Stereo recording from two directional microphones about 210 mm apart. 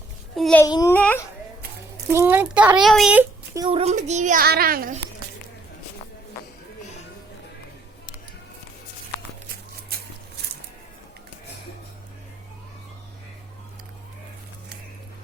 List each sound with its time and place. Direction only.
0.3 s a child's voice: centre (ahead or behind)
0.6 s a child's voice: 15° left (ahead or behind)
2.1 s a child's voice: 10° right (ahead or behind)
3.6 s a child's voice: 25° right (ahead or behind); by 4.9 s 45° right (ahead or behind)